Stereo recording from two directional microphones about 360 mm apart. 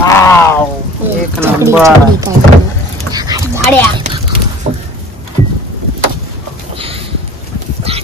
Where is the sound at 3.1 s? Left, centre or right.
Centre.